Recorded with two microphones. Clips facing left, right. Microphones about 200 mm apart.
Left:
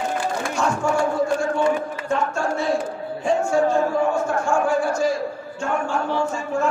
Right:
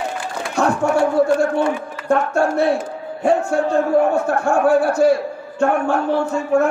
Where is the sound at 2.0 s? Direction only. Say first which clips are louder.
Right 7 dB; 60° right (ahead or behind).